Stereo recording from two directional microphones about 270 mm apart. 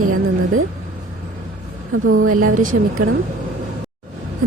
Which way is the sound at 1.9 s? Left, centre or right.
Right.